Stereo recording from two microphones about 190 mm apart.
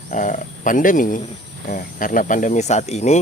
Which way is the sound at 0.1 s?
45° left (ahead or behind).